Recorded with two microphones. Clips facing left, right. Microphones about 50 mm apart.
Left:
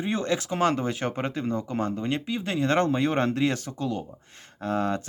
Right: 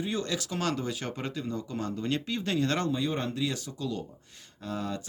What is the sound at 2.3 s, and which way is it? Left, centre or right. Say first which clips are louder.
Speech: left 4 dB; centre.